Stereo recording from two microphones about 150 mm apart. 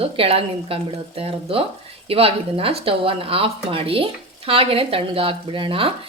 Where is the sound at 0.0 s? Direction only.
40° right (ahead or behind).